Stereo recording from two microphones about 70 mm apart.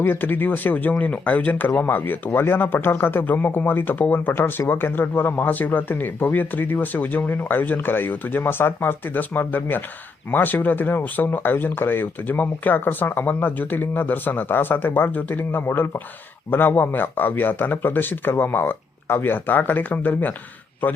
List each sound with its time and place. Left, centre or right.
0.0 s speech: left